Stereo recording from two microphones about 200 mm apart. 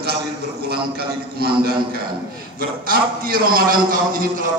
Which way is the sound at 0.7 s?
50° right (ahead or behind).